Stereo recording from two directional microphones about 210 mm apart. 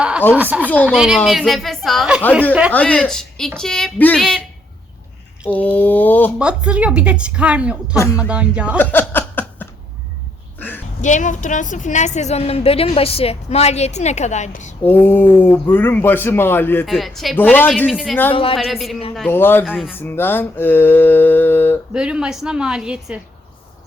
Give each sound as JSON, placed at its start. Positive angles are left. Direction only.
{"t": 0.6, "sound": "speech", "side_deg": 5}
{"t": 0.9, "sound": "a woman's voice", "side_deg": -5}
{"t": 2.7, "sound": "a woman's voice", "side_deg": 5}
{"t": 5.5, "sound": "speech", "side_deg": 10}
{"t": 6.4, "sound": "a woman's voice", "side_deg": -5}
{"t": 7.9, "sound": "speech", "side_deg": 15}
{"t": 8.2, "sound": "a woman's voice", "side_deg": -5}
{"t": 8.8, "sound": "a sound", "side_deg": 10}
{"t": 11.0, "sound": "a woman's voice", "side_deg": 35}
{"t": 14.8, "sound": "a woman's voice", "side_deg": 10}
{"t": 18.3, "sound": "a woman's voice", "side_deg": 25}
{"t": 18.5, "sound": "a woman's voice", "side_deg": 0}
{"t": 21.9, "sound": "a woman's voice", "side_deg": -5}